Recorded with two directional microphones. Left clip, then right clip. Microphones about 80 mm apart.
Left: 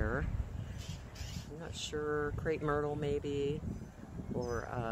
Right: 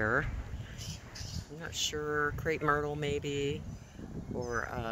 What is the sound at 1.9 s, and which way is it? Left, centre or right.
Speech, right.